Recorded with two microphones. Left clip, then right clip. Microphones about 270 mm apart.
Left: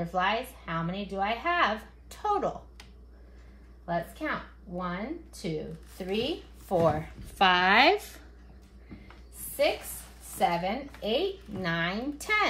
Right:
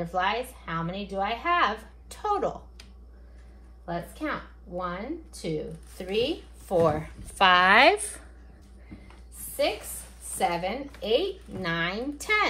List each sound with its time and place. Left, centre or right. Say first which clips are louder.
0.1 s a woman's voice: right 1 dB; centre
3.8 s a woman's voice: left 1 dB; centre
10.3 s a woman's voice: even; centre